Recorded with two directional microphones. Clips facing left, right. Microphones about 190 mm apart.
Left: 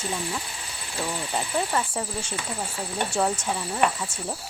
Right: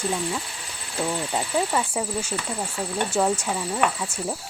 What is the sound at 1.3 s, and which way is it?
Speech, 10° right (ahead or behind).